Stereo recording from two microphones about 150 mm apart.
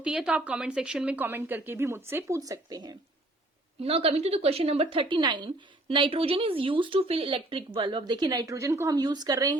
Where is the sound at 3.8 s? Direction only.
40° right (ahead or behind).